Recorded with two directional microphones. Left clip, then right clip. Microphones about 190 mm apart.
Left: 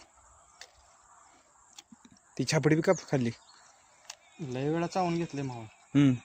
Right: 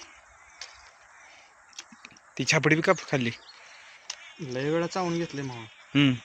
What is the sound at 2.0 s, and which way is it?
Speech, 25° left (ahead or behind).